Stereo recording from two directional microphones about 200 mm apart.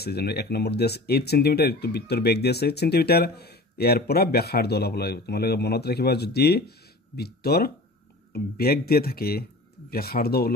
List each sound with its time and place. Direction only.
0.0 s speech: 55° left (ahead or behind)